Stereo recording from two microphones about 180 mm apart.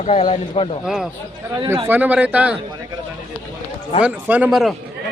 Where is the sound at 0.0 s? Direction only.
40° left (ahead or behind).